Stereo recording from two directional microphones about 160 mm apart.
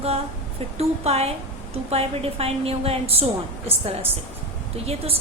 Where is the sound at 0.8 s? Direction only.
40° right (ahead or behind).